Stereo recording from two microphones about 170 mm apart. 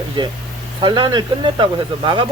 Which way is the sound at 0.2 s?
30° right (ahead or behind).